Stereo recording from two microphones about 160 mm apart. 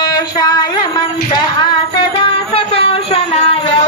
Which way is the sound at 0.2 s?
25° left (ahead or behind).